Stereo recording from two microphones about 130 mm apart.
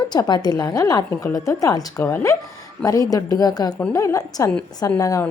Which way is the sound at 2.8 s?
25° left (ahead or behind).